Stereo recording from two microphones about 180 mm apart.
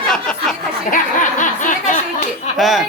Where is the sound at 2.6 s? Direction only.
Centre (ahead or behind).